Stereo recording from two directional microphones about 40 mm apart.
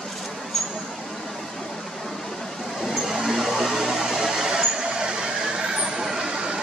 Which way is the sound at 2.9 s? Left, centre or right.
Centre.